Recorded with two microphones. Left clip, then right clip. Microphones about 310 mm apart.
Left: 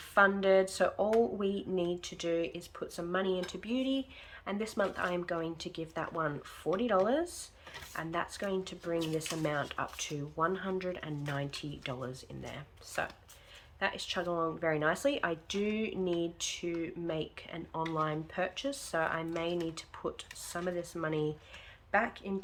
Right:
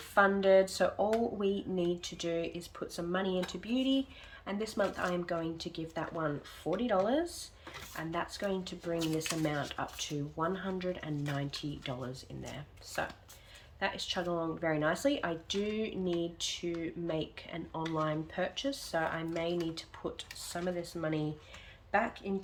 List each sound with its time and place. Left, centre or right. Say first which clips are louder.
0.1 s speech: even; centre